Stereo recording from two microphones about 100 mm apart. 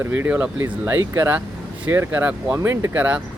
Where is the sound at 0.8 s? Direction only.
30° right (ahead or behind).